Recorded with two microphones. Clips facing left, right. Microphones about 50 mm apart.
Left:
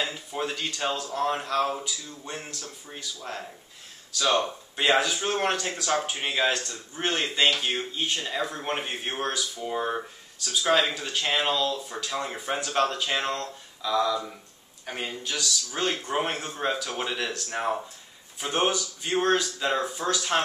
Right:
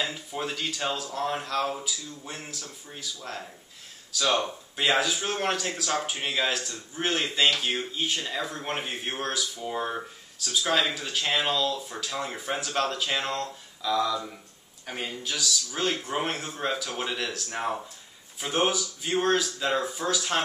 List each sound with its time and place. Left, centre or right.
0.1 s speech: centre